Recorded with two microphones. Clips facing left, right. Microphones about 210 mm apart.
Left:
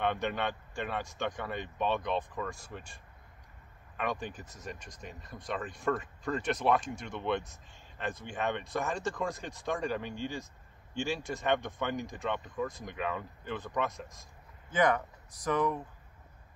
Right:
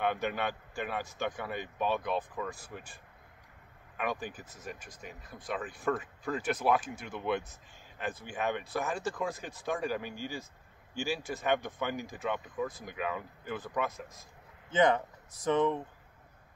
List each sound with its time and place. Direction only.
0.0 s speech: 5° right (ahead or behind)
14.7 s speech: 25° right (ahead or behind)